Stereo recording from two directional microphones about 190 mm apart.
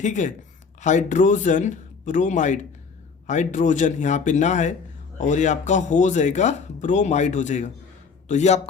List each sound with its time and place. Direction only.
0.0 s speech: 40° left (ahead or behind)